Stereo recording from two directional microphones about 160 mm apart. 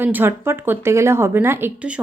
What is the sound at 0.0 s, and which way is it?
A woman's voice, 10° right (ahead or behind).